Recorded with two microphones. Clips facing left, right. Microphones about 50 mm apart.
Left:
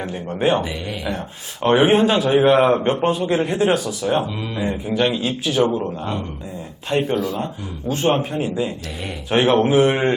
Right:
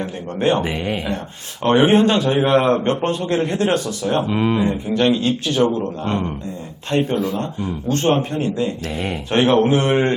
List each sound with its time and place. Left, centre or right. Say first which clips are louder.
0.0 s a man's voice: even; centre
0.6 s speech: right 5 dB; right
1.6 s a man's voice: right 1 dB; centre
4.3 s speech: right 9 dB; right
4.6 s a man's voice: right 2 dB; centre